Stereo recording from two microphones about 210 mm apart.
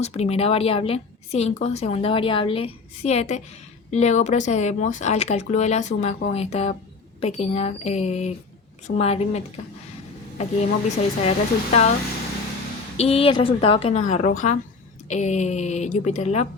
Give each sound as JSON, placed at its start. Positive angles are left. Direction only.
{"t": 0.0, "sound": "a woman's voice", "side_deg": 30}
{"t": 13.0, "sound": "a woman's voice", "side_deg": 25}